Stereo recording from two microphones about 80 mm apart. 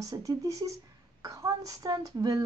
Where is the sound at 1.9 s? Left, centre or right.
Right.